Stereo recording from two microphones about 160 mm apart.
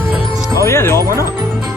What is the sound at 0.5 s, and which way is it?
Music, 15° left (ahead or behind).